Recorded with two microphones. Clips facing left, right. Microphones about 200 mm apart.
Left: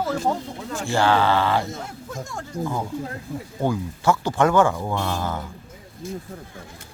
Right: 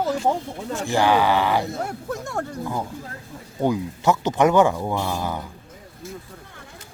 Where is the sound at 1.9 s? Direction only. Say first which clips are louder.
Right 4 dB; 65° right (ahead or behind).